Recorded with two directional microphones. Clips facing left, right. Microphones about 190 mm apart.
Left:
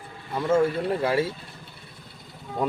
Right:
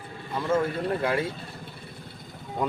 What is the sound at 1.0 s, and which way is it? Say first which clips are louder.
Speech: left 4 dB; 30° left (ahead or behind).